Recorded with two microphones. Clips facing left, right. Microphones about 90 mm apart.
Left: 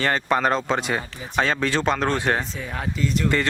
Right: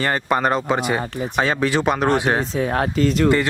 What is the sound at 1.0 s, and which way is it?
Speech, 50° right (ahead or behind).